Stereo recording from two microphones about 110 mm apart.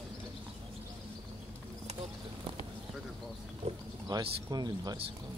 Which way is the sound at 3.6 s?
80° right.